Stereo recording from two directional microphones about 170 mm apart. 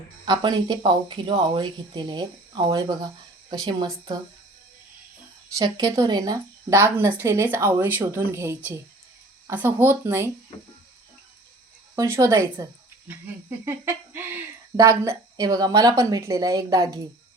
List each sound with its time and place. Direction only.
0.3 s speech: 25° right (ahead or behind)
5.5 s a woman's voice: 20° right (ahead or behind)
11.9 s a woman's voice: 15° right (ahead or behind)